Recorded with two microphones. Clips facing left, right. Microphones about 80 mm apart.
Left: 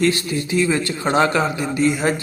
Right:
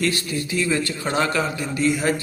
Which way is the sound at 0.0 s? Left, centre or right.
Left.